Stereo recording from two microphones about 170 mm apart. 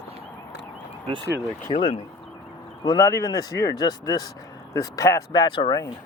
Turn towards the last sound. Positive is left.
turn(degrees=25)  # may be behind; listen again after turning